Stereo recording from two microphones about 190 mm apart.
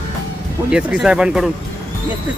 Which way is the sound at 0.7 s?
5° right (ahead or behind).